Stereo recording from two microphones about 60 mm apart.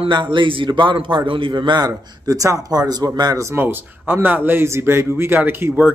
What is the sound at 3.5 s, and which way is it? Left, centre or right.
A man's voice, right.